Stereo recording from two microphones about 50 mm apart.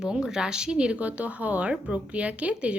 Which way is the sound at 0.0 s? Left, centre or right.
Centre.